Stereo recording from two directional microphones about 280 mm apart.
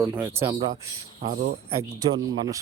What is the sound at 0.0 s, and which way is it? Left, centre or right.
Speech, centre.